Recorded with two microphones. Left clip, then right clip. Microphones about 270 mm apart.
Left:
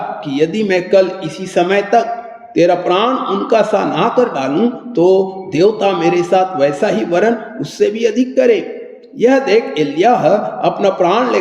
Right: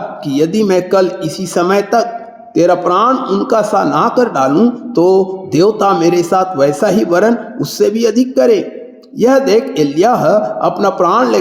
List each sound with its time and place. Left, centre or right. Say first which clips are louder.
0.3 s a man's voice: right 3 dB; right